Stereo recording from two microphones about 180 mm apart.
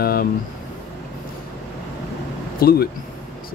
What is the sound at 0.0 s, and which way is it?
Speech, 55° left (ahead or behind).